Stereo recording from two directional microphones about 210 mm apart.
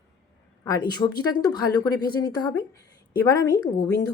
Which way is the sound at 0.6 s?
20° left (ahead or behind).